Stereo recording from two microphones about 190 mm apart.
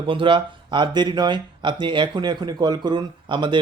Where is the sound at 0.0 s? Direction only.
25° right (ahead or behind).